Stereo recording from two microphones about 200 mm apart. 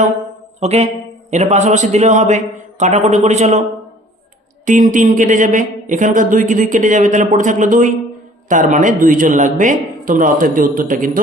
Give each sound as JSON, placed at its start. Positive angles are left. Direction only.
{"t": 0.6, "sound": "speech", "side_deg": -35}
{"t": 4.6, "sound": "speech", "side_deg": -40}